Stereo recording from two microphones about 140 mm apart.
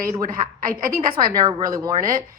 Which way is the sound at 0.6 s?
90° right.